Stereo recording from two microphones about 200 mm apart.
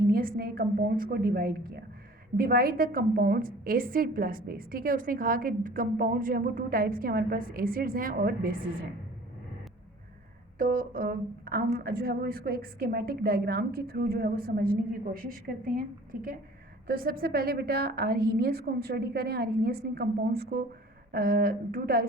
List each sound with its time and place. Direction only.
0.0 s a woman's voice: 45° right (ahead or behind)
10.6 s a woman's voice: 45° right (ahead or behind)